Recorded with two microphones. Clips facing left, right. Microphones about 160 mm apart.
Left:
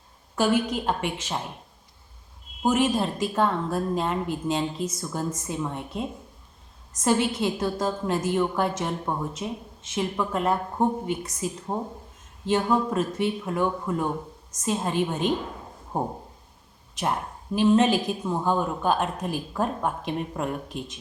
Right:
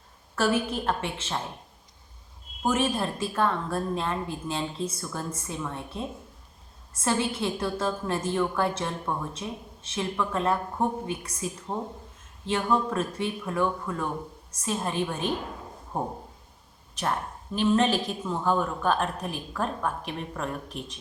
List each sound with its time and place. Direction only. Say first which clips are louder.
0.3 s speech: left 2 dB; 15° left (ahead or behind)
2.6 s a woman's voice: left 3 dB; 20° left (ahead or behind)
17.0 s a woman's voice: left 2 dB; 10° left (ahead or behind)